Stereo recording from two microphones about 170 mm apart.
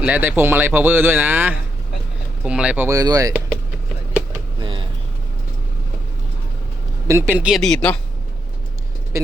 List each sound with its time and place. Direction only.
0.0 s speech: 10° right (ahead or behind)
4.6 s vehicle: 30° right (ahead or behind)
7.1 s speech: 10° right (ahead or behind); by 7.9 s 5° left (ahead or behind)